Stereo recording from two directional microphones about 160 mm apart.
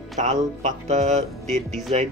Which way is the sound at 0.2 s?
45° right (ahead or behind).